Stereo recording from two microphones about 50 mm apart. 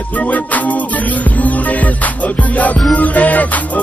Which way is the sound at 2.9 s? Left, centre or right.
Left.